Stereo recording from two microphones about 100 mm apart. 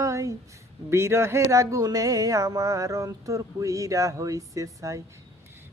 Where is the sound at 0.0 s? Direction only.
35° right (ahead or behind).